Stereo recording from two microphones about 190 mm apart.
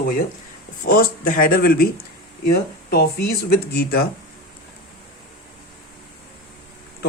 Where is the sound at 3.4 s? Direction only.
55° left (ahead or behind).